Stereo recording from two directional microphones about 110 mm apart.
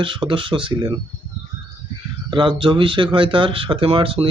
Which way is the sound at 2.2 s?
45° right (ahead or behind).